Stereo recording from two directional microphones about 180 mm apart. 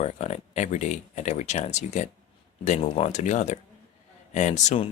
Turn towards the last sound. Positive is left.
turn(degrees=40)  # may be behind; listen again after turning